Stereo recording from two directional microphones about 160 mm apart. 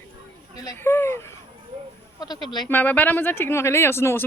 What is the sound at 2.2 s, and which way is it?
Speech, 25° left (ahead or behind).